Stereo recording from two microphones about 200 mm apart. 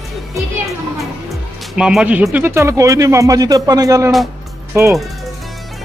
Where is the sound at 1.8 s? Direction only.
5° right (ahead or behind).